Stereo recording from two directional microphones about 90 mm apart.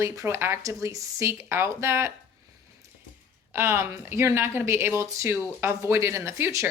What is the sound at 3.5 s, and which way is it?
Speech, 30° right (ahead or behind).